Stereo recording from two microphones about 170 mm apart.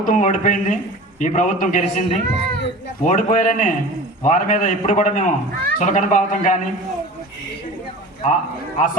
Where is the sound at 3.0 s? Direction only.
50° left (ahead or behind).